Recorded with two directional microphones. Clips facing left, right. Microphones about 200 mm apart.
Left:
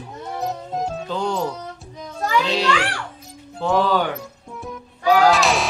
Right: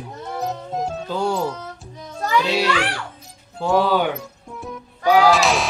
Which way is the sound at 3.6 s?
10° right (ahead or behind).